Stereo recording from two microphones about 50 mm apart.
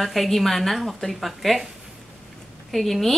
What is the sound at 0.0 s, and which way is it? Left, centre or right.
Speech, centre.